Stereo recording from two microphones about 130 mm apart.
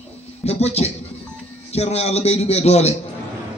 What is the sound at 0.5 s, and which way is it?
A man's voice, 55° left (ahead or behind).